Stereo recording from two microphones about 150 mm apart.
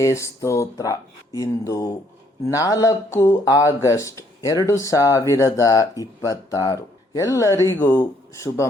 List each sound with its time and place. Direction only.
0.0 s speech: 20° left (ahead or behind)